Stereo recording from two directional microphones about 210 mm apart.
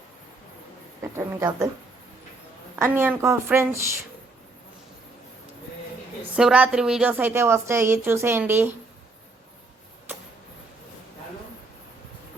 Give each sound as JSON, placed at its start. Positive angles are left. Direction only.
{"t": 1.1, "sound": "a woman's voice", "side_deg": -15}
{"t": 2.7, "sound": "a woman's voice", "side_deg": -10}
{"t": 6.3, "sound": "a woman's voice", "side_deg": -5}